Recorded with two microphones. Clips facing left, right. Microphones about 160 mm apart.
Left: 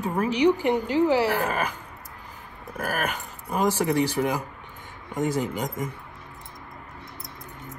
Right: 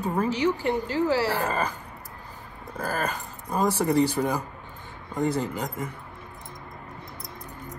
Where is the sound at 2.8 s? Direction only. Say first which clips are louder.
Even; 10° left (ahead or behind).